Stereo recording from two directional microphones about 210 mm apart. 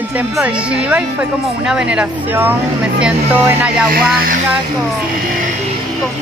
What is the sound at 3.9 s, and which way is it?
Speech, 45° right (ahead or behind).